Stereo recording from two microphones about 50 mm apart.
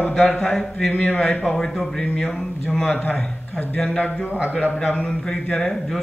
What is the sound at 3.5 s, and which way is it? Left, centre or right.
Speech, left.